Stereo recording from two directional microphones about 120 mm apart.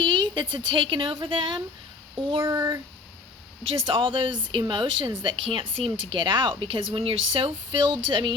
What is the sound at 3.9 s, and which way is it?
A woman's voice, 45° right (ahead or behind).